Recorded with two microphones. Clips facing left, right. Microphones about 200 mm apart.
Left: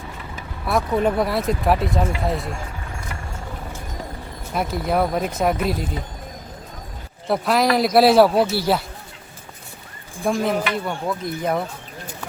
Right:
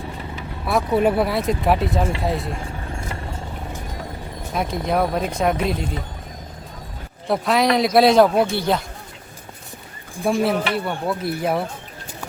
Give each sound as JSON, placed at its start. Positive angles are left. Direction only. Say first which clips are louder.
{"t": 0.6, "sound": "speech", "louder": "right 2 dB", "side_deg": 0}
{"t": 2.6, "sound": "vehicle", "louder": "right 3 dB", "side_deg": -30}
{"t": 4.5, "sound": "speech", "louder": "even", "side_deg": 5}
{"t": 7.3, "sound": "speech", "louder": "even", "side_deg": 0}
{"t": 10.2, "sound": "speech", "louder": "right 1 dB", "side_deg": -5}